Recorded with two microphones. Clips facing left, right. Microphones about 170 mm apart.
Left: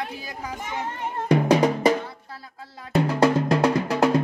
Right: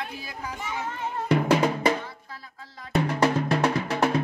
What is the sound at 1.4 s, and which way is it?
Drum, 40° left (ahead or behind).